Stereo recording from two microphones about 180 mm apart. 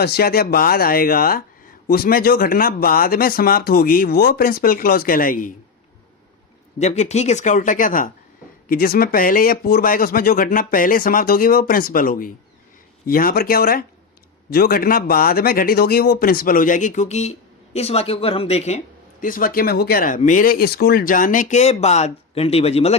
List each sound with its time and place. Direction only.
0.0 s speech: 60° left (ahead or behind)
6.7 s speech: 40° left (ahead or behind)
19.2 s speech: 50° left (ahead or behind); by 23.0 s 35° left (ahead or behind)